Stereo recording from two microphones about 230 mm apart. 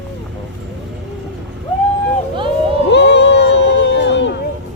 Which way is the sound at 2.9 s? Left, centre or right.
Left.